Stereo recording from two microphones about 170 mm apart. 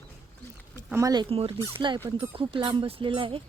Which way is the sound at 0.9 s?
15° right (ahead or behind).